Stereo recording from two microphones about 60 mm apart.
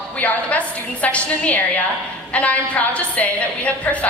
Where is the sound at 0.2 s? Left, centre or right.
Left.